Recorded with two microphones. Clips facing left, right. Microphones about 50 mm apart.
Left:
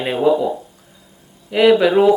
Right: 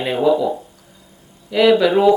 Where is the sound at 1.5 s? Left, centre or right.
Centre.